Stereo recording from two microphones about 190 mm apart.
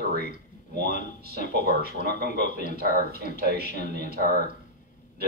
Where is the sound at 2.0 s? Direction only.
45° left (ahead or behind).